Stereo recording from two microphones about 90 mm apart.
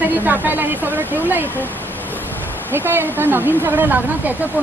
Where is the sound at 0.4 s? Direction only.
20° right (ahead or behind).